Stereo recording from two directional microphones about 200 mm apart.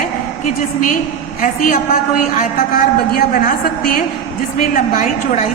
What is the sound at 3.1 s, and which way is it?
A woman's voice, 45° left (ahead or behind).